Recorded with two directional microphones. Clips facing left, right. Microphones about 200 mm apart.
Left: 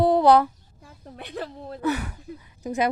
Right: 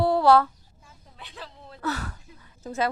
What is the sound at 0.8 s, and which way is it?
Speech, 55° left (ahead or behind).